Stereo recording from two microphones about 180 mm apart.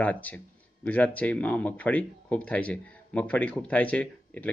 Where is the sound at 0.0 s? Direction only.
10° left (ahead or behind).